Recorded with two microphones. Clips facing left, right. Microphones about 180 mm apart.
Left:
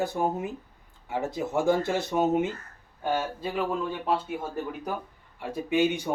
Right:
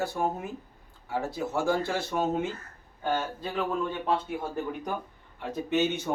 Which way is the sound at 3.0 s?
10° left (ahead or behind).